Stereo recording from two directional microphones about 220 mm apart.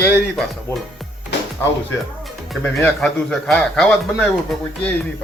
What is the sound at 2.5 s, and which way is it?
A man's voice, 10° left (ahead or behind).